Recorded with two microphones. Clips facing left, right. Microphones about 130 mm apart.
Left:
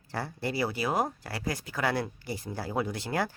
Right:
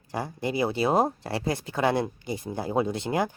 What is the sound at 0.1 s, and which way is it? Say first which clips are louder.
Speech: right 4 dB; 15° right (ahead or behind).